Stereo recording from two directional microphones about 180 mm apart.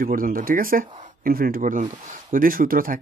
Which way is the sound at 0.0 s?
50° right (ahead or behind).